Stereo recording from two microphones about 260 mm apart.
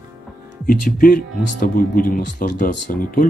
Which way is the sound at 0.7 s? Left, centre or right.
Left.